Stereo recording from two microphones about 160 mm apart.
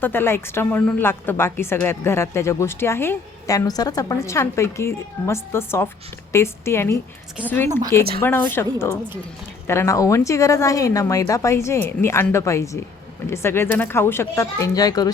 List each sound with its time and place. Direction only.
0.0 s a woman's voice: 15° left (ahead or behind)
7.7 s a woman's voice: 25° right (ahead or behind)
8.2 s a woman's voice: 15° left (ahead or behind)